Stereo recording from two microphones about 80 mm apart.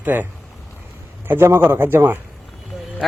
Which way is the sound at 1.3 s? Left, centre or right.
Right.